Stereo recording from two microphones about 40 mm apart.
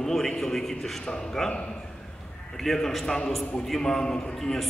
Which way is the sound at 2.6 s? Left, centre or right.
Centre.